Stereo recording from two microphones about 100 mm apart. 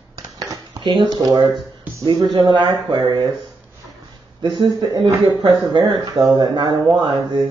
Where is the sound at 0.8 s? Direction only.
50° right (ahead or behind).